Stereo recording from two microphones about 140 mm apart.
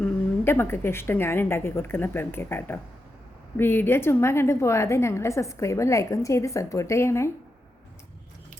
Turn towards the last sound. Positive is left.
turn(degrees=20)  # may be behind; listen again after turning